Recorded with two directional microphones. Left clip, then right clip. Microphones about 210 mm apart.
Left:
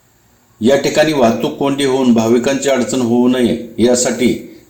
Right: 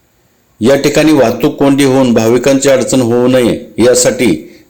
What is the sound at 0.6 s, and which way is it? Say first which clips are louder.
A man's voice: right 3 dB; 50° right (ahead or behind).